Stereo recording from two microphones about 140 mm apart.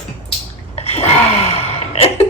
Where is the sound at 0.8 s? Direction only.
50° left (ahead or behind).